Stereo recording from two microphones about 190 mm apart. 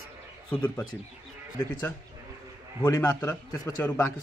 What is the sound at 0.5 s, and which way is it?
Speech, 10° left (ahead or behind).